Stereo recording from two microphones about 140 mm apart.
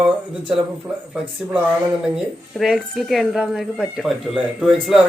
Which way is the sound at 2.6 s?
5° right (ahead or behind).